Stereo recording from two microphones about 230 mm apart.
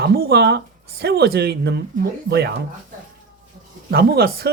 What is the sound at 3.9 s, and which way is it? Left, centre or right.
Speech, right.